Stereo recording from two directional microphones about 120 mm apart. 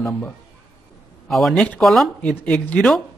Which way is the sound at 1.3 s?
Centre (ahead or behind).